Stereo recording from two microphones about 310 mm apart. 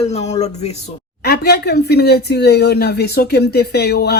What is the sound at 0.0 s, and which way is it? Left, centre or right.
A woman's voice, left.